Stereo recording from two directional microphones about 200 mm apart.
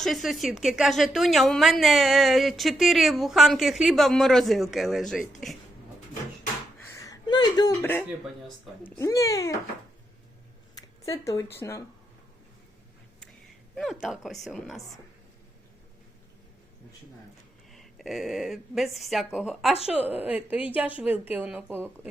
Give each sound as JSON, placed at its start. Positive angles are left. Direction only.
{"t": 0.0, "sound": "a woman's voice", "side_deg": 0}
{"t": 6.9, "sound": "a sound", "side_deg": 15}
{"t": 9.0, "sound": "a child's voice", "side_deg": 15}
{"t": 10.8, "sound": "speech", "side_deg": 15}
{"t": 13.7, "sound": "a woman's voice", "side_deg": 0}
{"t": 17.7, "sound": "a woman's voice", "side_deg": 0}